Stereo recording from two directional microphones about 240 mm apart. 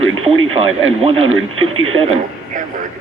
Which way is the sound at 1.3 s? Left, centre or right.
Right.